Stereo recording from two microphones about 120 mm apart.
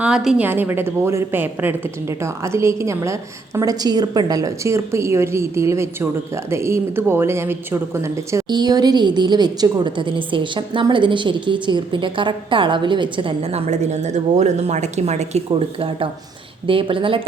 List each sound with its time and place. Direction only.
0.0 s a woman's voice: 5° right (ahead or behind)
0.4 s a woman's voice: 15° right (ahead or behind); by 13.5 s 45° right (ahead or behind)
13.5 s a woman's voice: 65° right (ahead or behind)
15.4 s speech: 50° right (ahead or behind)